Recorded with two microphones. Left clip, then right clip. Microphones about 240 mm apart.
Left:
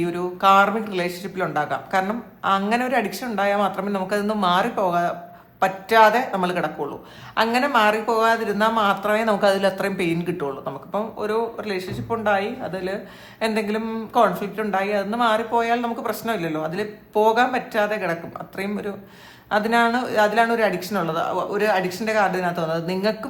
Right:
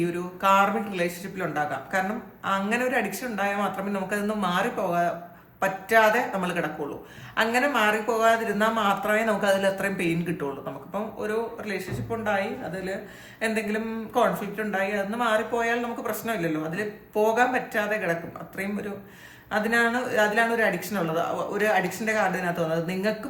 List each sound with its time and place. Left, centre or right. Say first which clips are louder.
0.0 s speech: left 5 dB; centre